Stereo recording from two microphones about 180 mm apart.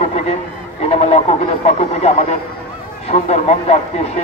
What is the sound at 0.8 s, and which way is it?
Speech, 35° left (ahead or behind).